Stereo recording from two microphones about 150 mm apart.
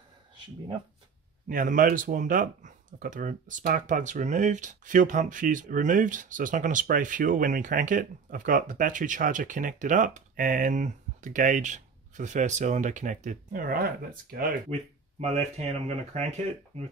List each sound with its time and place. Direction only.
1.5 s speech: 65° right (ahead or behind)
14.7 s speech: 45° right (ahead or behind)